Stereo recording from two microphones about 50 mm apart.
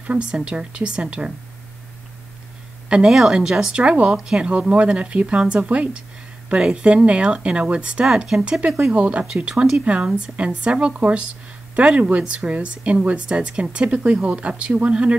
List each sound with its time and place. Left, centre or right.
0.0 s a woman's voice: right
3.1 s a woman's voice: centre
3.8 s a woman's voice: right